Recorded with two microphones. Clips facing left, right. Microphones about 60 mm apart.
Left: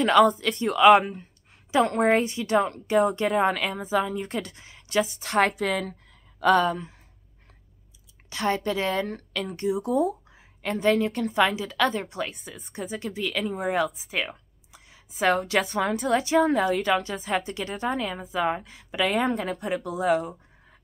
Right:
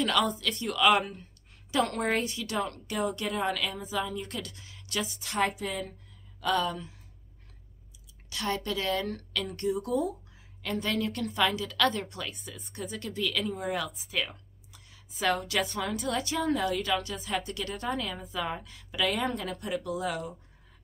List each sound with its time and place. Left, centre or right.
0.2 s a woman's voice: left
3.3 s a woman's voice: left
5.2 s speech: left
5.6 s a woman's voice: left
6.4 s speech: left
8.3 s a woman's voice: left
13.4 s speech: left
14.3 s a woman's voice: left
17.4 s a woman's voice: left